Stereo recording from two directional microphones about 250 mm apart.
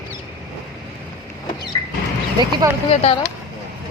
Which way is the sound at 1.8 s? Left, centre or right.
Centre.